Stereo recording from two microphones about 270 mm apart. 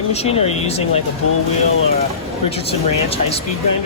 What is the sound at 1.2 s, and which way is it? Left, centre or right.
Speech, left.